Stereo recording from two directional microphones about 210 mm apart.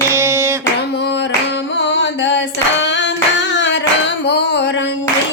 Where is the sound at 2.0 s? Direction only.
60° left (ahead or behind).